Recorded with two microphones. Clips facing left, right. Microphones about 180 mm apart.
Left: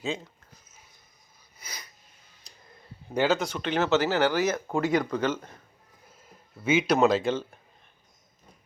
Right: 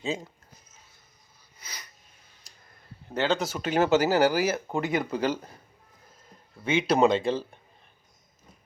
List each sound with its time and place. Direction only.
1.5 s a sound: 10° left (ahead or behind)
3.2 s speech: 5° left (ahead or behind)
4.0 s a man's voice: 40° right (ahead or behind)
4.3 s speech: 10° right (ahead or behind)
5.1 s a man's voice: 30° right (ahead or behind)
6.7 s speech: centre (ahead or behind)